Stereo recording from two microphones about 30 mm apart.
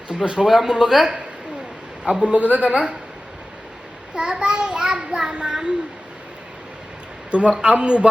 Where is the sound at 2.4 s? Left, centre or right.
Right.